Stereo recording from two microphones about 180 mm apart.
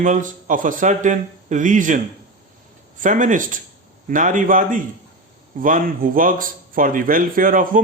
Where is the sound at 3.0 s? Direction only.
45° right (ahead or behind).